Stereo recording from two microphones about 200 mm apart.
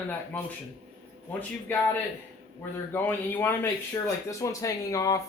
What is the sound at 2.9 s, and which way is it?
Speech, 10° left (ahead or behind).